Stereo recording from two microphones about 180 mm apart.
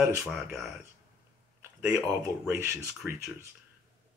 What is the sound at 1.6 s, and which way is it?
Speech, 15° right (ahead or behind).